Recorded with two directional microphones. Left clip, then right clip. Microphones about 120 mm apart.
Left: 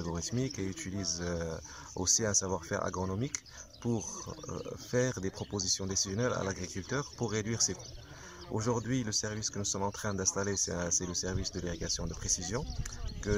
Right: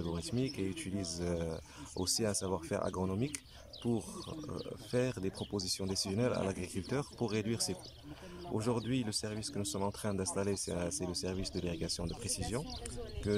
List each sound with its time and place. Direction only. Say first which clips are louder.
0.0 s speech: left 1 dB; 5° right (ahead or behind)
1.5 s speech: left 2 dB; 5° right (ahead or behind)
13.3 s speech: left 1 dB; 20° right (ahead or behind)